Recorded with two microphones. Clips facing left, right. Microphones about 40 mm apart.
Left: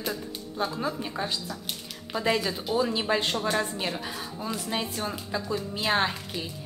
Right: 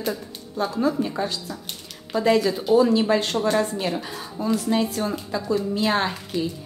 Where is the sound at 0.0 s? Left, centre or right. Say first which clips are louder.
Right 4 dB; centre.